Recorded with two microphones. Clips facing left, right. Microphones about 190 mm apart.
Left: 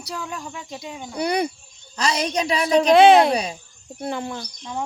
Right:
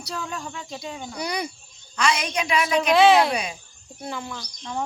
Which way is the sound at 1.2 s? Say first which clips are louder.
Left 7 dB; 55° left (ahead or behind).